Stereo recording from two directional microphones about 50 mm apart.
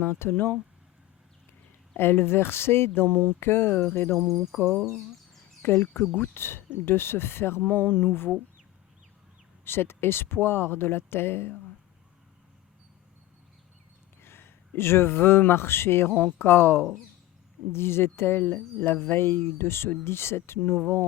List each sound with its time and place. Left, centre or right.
0.0 s speech: left
2.0 s speech: left
4.6 s speech: centre
5.6 s speech: left
9.6 s speech: left
14.2 s a sound: left
14.8 s speech: left
16.0 s speech: left
16.4 s speech: left